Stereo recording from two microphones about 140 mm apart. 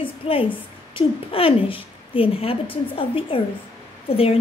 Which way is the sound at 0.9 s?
40° left (ahead or behind).